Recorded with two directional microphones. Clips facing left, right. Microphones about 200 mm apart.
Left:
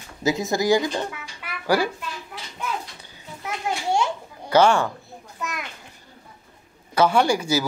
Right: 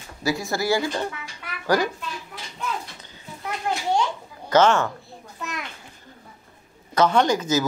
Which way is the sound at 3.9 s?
10° left (ahead or behind).